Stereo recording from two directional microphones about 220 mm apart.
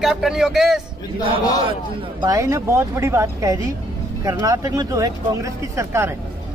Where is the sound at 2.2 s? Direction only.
15° right (ahead or behind).